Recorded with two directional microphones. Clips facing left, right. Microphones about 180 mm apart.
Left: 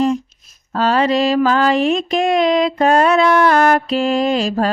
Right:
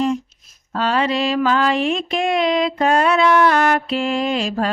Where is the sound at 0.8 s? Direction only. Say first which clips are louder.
Left 4 dB; 40° left (ahead or behind).